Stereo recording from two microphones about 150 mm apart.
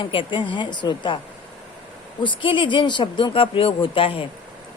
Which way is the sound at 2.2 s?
35° left (ahead or behind).